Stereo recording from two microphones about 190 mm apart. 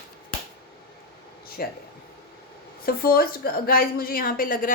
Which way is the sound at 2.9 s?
50° left (ahead or behind).